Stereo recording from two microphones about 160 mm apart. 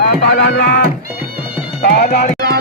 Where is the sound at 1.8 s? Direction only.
65° left (ahead or behind).